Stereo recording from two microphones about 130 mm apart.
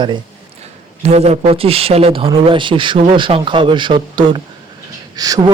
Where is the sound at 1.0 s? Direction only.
55° right (ahead or behind).